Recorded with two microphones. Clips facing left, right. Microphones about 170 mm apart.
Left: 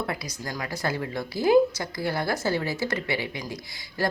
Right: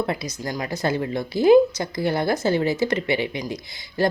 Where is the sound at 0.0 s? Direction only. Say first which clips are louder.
Right 6 dB; 25° right (ahead or behind).